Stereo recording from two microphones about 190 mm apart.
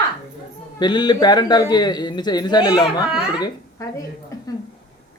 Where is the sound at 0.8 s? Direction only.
20° left (ahead or behind).